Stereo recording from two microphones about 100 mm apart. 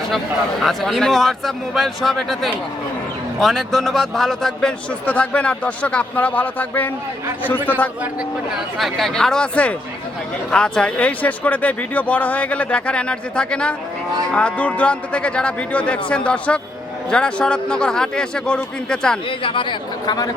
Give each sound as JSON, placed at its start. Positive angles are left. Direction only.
{"t": 0.6, "sound": "a man's voice", "side_deg": 0}
{"t": 5.0, "sound": "a man's voice", "side_deg": 15}
{"t": 8.5, "sound": "a man's voice", "side_deg": 0}
{"t": 19.4, "sound": "speech", "side_deg": 60}